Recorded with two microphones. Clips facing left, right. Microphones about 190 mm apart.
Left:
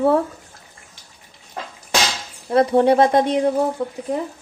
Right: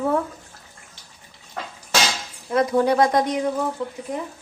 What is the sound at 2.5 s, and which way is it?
Speech, 30° left (ahead or behind).